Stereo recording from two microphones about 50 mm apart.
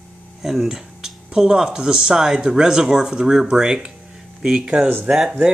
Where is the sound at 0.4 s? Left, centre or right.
Centre.